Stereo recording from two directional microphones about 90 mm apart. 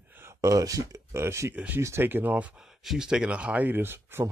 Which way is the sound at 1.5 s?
20° right (ahead or behind).